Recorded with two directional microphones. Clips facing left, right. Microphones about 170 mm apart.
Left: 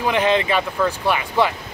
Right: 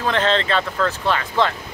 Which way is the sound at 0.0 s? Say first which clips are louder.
Left 1 dB; 15° left (ahead or behind).